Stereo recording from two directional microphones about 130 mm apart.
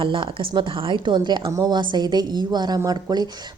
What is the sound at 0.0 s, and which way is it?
Speech, 40° right (ahead or behind).